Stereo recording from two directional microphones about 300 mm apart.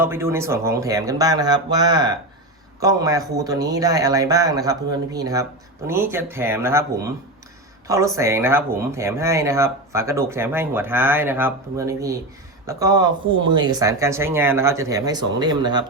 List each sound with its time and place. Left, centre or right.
0.0 s speech: centre